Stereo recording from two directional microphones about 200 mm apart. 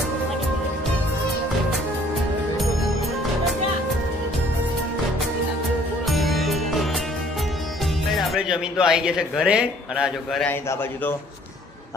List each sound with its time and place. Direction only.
6.1 s music: centre (ahead or behind)
8.3 s a man's voice: 5° right (ahead or behind)